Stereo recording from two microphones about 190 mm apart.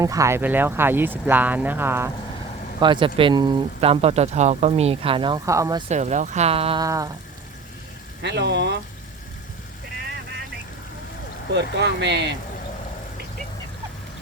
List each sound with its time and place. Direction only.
0.0 s speech: 15° right (ahead or behind)
2.8 s speech: 25° right (ahead or behind)
5.9 s speech: 40° right (ahead or behind)
6.8 s speech: 15° right (ahead or behind)
8.2 s speech: 65° right (ahead or behind)
11.5 s speech: 65° right (ahead or behind)